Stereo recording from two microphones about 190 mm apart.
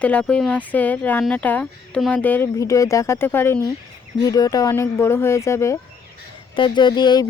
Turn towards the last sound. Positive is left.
turn(degrees=20)  # may be behind; listen again after turning